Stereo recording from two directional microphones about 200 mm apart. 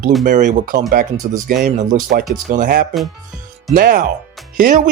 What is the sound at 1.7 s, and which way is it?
Speech, 40° right (ahead or behind).